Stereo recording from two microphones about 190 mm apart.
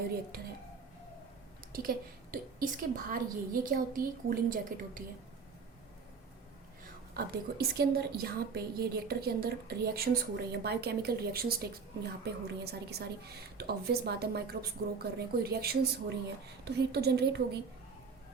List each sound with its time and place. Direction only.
1.7 s a woman's voice: 50° right (ahead or behind)
7.1 s a woman's voice: 55° right (ahead or behind)